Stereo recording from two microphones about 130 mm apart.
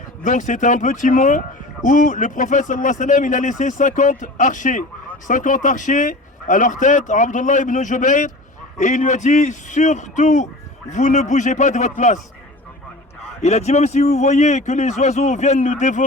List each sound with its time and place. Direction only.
0.2 s speech: 80° left
13.4 s a man's voice: 60° left (ahead or behind)